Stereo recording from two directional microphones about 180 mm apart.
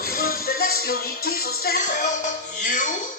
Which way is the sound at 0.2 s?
55° left (ahead or behind).